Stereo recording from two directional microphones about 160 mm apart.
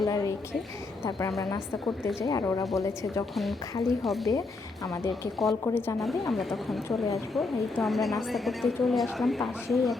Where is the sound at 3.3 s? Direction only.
Centre (ahead or behind).